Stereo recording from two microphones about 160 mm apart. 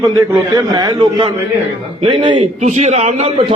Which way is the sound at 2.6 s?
45° right (ahead or behind).